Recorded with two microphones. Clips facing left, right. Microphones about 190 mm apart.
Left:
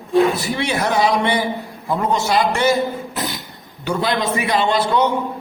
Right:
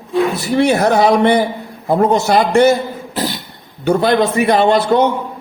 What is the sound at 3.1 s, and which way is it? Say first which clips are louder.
Beatboxing: right 5 dB; 30° right (ahead or behind).